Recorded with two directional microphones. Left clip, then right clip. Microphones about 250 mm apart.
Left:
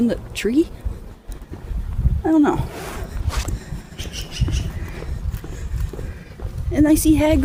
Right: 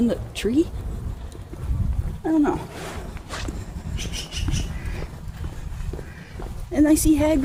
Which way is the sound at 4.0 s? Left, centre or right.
Centre.